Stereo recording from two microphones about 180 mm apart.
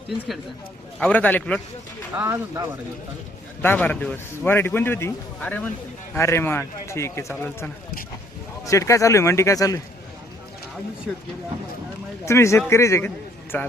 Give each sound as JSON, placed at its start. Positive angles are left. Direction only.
{"t": 0.9, "sound": "a man's voice", "side_deg": 5}
{"t": 2.1, "sound": "speech", "side_deg": -15}
{"t": 3.6, "sound": "a man's voice", "side_deg": 10}
{"t": 12.2, "sound": "a man's voice", "side_deg": 15}